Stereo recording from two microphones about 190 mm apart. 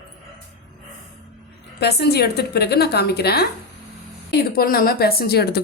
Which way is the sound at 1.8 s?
60° left (ahead or behind).